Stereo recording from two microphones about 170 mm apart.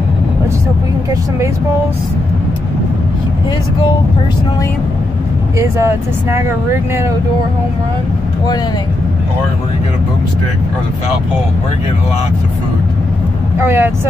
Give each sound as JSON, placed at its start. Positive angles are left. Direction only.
{"t": 5.6, "sound": "speech", "side_deg": -15}
{"t": 13.6, "sound": "speech", "side_deg": -15}